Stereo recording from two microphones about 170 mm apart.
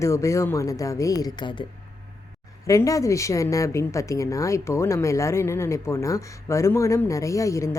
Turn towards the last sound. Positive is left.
turn(degrees=20)  # may be behind; listen again after turning